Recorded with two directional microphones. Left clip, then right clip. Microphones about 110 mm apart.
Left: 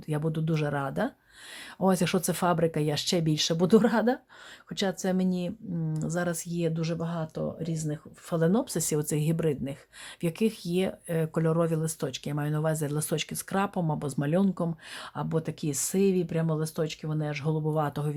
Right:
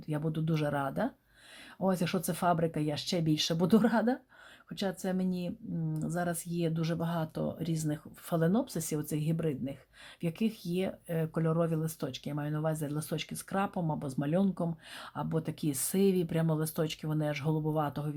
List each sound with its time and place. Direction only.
0.1 s a woman's voice: 30° left (ahead or behind)
1.8 s a woman's voice: 45° left (ahead or behind); by 8.4 s 15° left (ahead or behind)
8.4 s speech: 30° left (ahead or behind); by 17.6 s 15° left (ahead or behind)
17.7 s speech: 30° left (ahead or behind)